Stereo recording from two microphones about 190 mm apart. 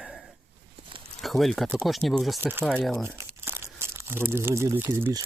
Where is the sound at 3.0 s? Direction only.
10° right (ahead or behind).